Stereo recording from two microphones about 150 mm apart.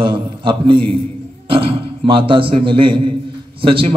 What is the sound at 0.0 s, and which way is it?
A man's voice, 35° right (ahead or behind).